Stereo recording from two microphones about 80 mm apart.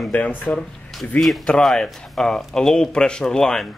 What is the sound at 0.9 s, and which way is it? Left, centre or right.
Speech, centre.